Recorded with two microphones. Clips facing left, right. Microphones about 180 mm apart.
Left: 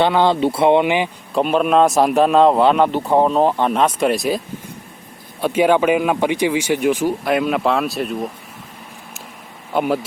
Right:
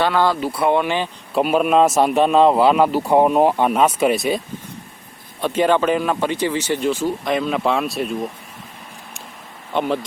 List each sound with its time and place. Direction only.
0.0 s speech: 20° left (ahead or behind)
1.3 s a man's voice: 5° right (ahead or behind)
5.4 s speech: 10° left (ahead or behind)
9.7 s speech: 5° left (ahead or behind)